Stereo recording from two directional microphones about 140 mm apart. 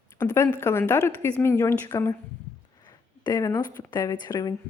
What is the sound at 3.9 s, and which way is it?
Speech, 30° left (ahead or behind).